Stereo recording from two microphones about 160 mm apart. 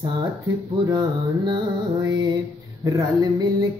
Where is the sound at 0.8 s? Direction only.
25° right (ahead or behind).